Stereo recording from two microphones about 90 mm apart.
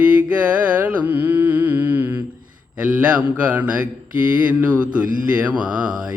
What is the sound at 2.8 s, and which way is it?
Mantra, 15° right (ahead or behind).